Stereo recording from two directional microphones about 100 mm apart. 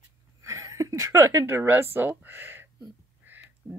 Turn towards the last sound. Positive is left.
turn(degrees=-20)  # may be behind; listen again after turning